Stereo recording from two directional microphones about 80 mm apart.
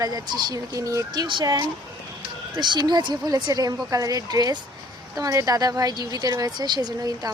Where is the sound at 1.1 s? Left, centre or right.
Right.